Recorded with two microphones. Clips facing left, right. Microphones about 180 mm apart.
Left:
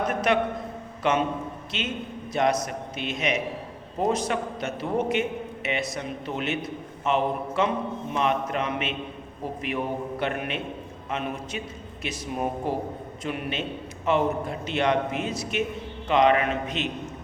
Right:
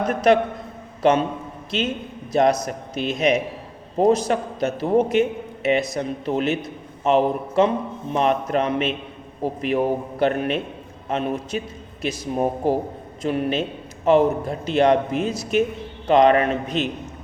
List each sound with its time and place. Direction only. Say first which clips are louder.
0.1 s a man's voice: right 6 dB; 35° right (ahead or behind)